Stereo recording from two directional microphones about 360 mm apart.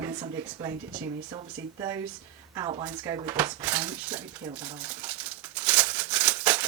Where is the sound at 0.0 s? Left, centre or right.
Centre.